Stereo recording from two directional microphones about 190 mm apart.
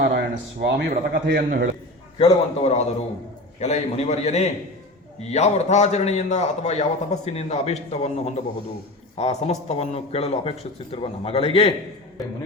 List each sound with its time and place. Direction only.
0.0 s a man's voice: 60° right (ahead or behind)
2.1 s a man's voice: 30° left (ahead or behind)